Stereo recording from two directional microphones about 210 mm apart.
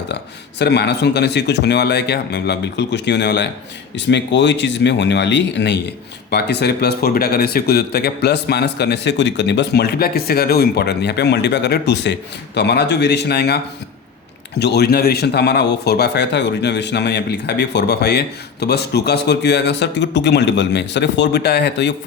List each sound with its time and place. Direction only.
0.6 s a man's voice: 50° left (ahead or behind)
14.6 s speech: 50° left (ahead or behind)